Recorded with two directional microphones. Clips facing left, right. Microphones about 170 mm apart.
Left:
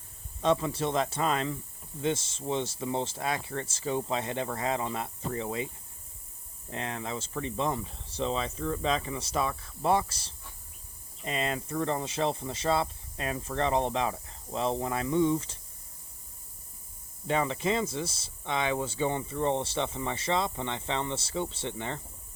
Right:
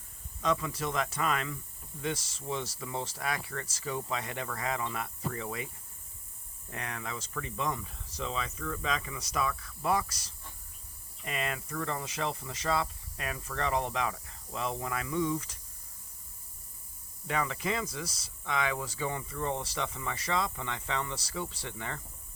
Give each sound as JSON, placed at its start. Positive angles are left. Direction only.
{"t": 0.4, "sound": "speech", "side_deg": 30}
{"t": 6.7, "sound": "speech", "side_deg": 25}
{"t": 17.2, "sound": "speech", "side_deg": 25}